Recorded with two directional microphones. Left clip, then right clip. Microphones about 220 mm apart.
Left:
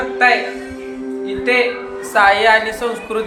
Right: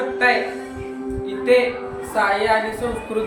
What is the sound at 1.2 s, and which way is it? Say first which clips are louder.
Music: even; centre (ahead or behind).